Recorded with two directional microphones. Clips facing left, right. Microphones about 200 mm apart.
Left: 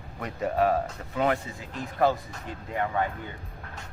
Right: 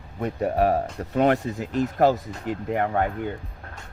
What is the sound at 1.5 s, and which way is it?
Speech, 75° right (ahead or behind).